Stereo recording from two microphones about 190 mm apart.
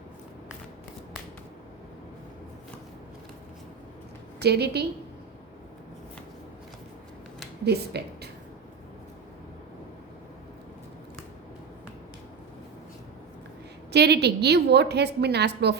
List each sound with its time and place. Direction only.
4.4 s a woman's voice: 60° right (ahead or behind)
7.6 s a woman's voice: 60° right (ahead or behind)
13.9 s a woman's voice: 60° right (ahead or behind)